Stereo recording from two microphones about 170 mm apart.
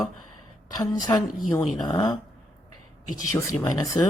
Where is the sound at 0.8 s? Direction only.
20° left (ahead or behind).